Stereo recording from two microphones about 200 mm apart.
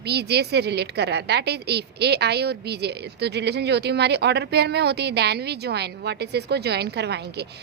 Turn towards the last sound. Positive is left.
turn(degrees=-55)  # may be behind; listen again after turning